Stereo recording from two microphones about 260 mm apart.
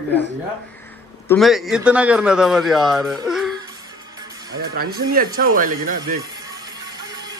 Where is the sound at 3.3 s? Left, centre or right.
Centre.